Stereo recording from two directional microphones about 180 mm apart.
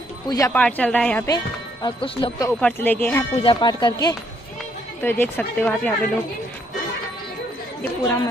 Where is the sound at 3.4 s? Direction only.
25° left (ahead or behind).